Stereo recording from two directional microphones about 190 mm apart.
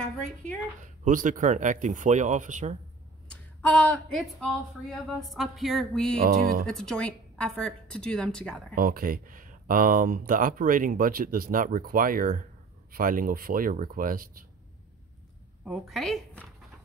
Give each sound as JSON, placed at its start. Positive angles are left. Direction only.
{"t": 0.0, "sound": "a woman's voice", "side_deg": 5}
{"t": 1.0, "sound": "speech", "side_deg": -45}
{"t": 3.3, "sound": "a woman's voice", "side_deg": 5}
{"t": 6.2, "sound": "speech", "side_deg": -50}
{"t": 6.7, "sound": "a woman's voice", "side_deg": 0}
{"t": 8.7, "sound": "speech", "side_deg": -50}
{"t": 15.6, "sound": "a woman's voice", "side_deg": 0}